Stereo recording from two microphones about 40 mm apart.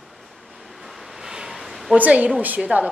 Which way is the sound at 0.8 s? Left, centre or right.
Centre.